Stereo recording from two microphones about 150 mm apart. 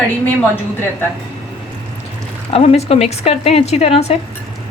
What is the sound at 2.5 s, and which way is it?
A woman's voice, 45° left (ahead or behind).